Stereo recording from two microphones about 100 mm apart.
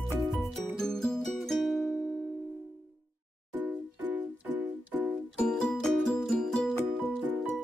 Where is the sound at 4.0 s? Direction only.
15° right (ahead or behind).